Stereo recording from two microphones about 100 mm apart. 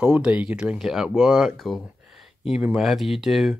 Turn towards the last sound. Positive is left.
turn(degrees=-5)  # may be behind; listen again after turning